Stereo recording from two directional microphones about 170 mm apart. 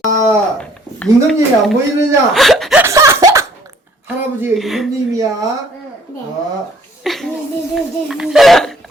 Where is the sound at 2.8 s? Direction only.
15° right (ahead or behind).